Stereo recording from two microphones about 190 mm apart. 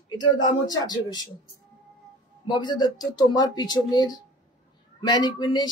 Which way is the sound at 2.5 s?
25° left (ahead or behind).